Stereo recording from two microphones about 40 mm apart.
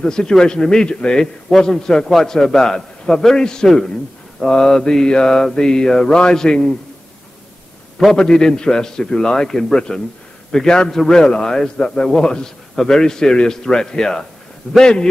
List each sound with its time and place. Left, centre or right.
0.0 s a man's voice: centre
8.1 s a man's voice: centre